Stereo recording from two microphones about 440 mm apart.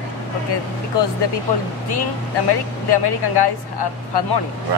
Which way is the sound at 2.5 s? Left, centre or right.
Left.